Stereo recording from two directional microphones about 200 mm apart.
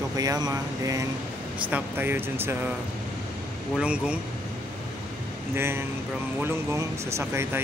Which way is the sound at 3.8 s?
5° right (ahead or behind).